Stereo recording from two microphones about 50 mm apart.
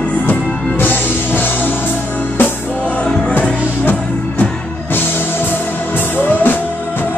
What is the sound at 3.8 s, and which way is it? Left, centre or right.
Music, left.